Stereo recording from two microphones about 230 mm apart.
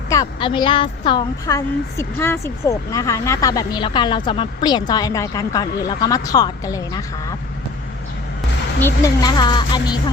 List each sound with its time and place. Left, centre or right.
0.1 s a woman's voice: centre
8.8 s a woman's voice: centre